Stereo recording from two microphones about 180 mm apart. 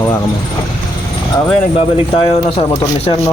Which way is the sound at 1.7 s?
30° left (ahead or behind).